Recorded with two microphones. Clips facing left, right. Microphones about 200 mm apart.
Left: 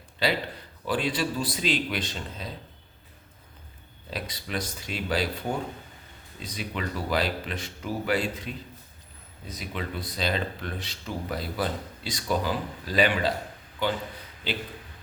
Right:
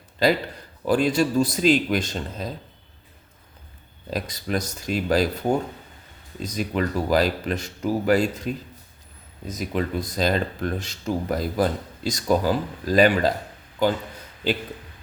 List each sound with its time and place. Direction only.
0.9 s speech: 45° right (ahead or behind)
4.1 s speech: 45° right (ahead or behind)